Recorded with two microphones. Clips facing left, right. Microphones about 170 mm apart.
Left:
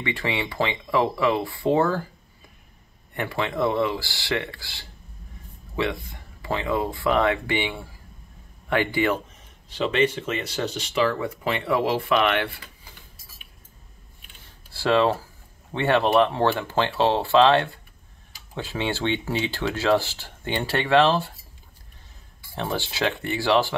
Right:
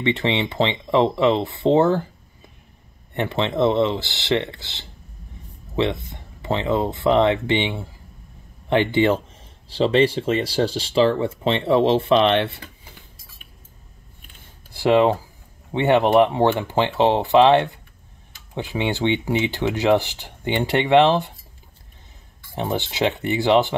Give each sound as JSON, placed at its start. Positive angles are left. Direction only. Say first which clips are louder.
{"t": 0.0, "sound": "speech", "louder": "right 6 dB", "side_deg": -20}
{"t": 3.2, "sound": "speech", "louder": "right 5 dB", "side_deg": -20}
{"t": 14.7, "sound": "speech", "louder": "right 4 dB", "side_deg": -20}
{"t": 22.6, "sound": "speech", "louder": "right 4 dB", "side_deg": -20}